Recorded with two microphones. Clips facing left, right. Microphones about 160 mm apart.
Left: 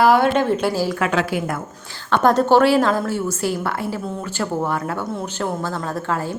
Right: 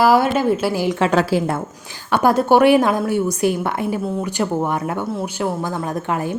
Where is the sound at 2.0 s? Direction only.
10° right (ahead or behind).